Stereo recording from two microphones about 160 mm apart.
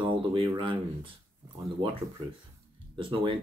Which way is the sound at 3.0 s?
35° right (ahead or behind).